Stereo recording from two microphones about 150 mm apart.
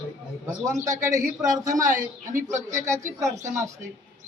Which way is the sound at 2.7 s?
20° right (ahead or behind).